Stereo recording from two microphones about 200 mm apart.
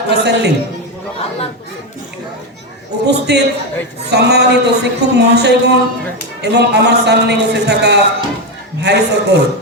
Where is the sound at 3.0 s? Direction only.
55° right (ahead or behind).